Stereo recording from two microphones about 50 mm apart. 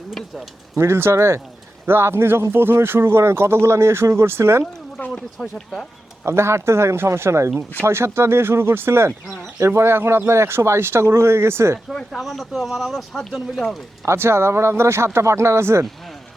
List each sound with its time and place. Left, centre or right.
0.8 s speech: right
1.1 s speech: right
1.9 s speech: right
5.1 s speech: centre
6.2 s speech: right
7.9 s speech: right
12.1 s speech: centre
14.0 s speech: right